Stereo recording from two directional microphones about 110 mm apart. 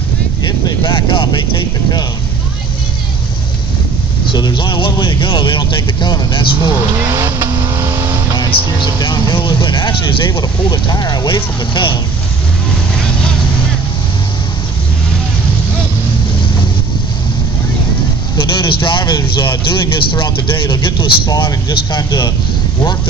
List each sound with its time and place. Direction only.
0.4 s vehicle: 40° left (ahead or behind)
4.3 s speech: 45° left (ahead or behind)
7.0 s vehicle: 25° right (ahead or behind)
8.4 s speech: 40° left (ahead or behind)
18.4 s speech: 50° left (ahead or behind)